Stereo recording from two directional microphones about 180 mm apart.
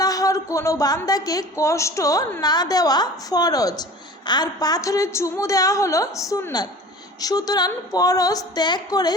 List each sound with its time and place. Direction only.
0.0 s a woman's voice: 20° left (ahead or behind)